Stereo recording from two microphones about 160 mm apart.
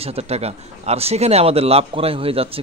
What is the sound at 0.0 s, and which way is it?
Speech, 40° right (ahead or behind).